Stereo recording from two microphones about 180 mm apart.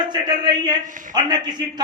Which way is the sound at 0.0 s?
25° right (ahead or behind).